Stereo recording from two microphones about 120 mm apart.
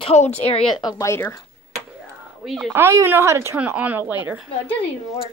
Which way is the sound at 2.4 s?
Centre (ahead or behind).